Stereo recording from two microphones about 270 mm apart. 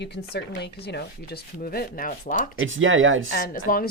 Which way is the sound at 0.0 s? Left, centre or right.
Left.